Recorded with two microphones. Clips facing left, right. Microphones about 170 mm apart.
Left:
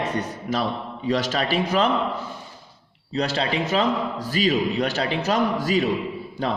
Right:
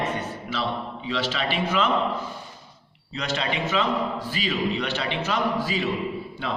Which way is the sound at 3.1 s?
35° left (ahead or behind).